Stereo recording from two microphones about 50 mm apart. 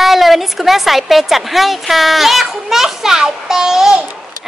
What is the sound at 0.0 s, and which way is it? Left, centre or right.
A woman's voice, centre.